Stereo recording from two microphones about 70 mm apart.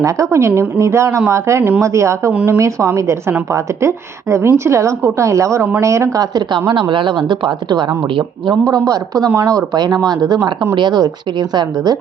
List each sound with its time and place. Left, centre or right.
0.0 s a woman's voice: right
7.7 s speech: right
8.4 s speech: right
10.8 s speech: right